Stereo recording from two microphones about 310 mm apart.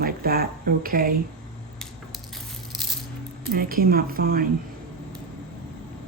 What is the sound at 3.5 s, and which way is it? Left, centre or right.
Speech, right.